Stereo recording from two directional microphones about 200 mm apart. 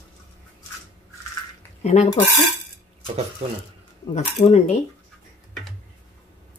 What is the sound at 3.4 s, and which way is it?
Speech, 30° right (ahead or behind).